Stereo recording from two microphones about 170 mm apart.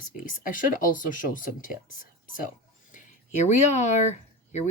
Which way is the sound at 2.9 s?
45° left (ahead or behind).